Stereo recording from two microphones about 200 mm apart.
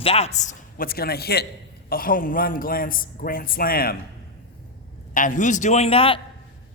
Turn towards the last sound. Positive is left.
turn(degrees=30)  # may be behind; listen again after turning